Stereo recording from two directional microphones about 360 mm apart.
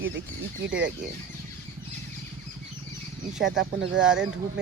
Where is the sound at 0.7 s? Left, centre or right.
Right.